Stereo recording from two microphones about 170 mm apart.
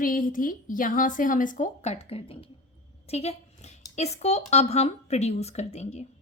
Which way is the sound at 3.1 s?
40° left (ahead or behind).